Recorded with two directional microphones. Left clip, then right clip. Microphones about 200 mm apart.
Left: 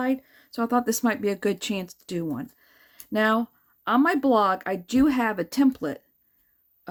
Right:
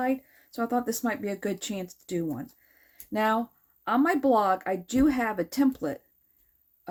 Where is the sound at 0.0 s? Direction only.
20° left (ahead or behind).